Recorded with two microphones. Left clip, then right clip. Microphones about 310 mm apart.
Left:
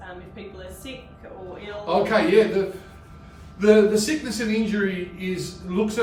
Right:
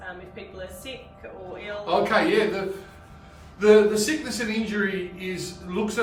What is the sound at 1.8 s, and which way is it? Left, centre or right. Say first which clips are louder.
Speech: left 1 dB; centre.